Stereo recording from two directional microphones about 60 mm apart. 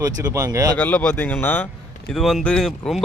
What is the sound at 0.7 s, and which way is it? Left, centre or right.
Speech, left.